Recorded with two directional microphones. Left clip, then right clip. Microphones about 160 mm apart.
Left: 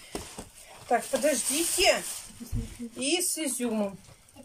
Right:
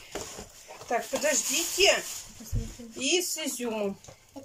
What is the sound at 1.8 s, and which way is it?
Speech, 5° right (ahead or behind).